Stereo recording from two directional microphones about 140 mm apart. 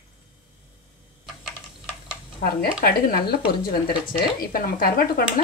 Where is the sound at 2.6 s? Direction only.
90° left.